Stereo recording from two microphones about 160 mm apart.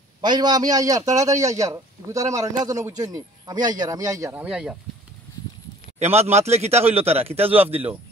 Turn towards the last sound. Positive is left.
turn(degrees=-10)  # may be behind; listen again after turning